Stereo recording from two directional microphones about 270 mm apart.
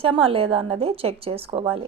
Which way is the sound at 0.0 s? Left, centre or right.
Right.